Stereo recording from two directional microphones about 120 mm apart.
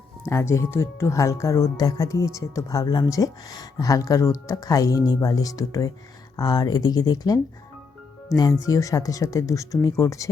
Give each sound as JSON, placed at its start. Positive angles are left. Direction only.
{"t": 0.3, "sound": "speech", "side_deg": 25}
{"t": 8.6, "sound": "speech", "side_deg": 30}